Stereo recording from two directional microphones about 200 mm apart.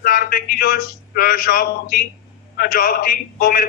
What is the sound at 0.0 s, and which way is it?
A man's voice, 45° left (ahead or behind).